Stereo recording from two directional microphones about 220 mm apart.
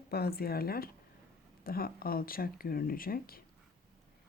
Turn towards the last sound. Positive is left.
turn(degrees=40)  # may be behind; listen again after turning